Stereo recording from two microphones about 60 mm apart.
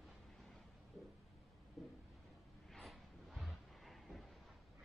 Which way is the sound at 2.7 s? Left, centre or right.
Centre.